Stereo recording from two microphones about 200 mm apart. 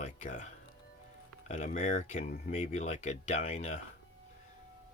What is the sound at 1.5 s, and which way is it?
Speech, 40° left (ahead or behind).